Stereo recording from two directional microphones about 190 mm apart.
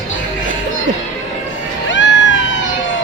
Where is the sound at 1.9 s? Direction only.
75° left (ahead or behind).